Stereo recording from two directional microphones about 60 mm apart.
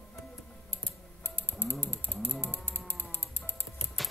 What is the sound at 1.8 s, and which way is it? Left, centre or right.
Mechanisms, left.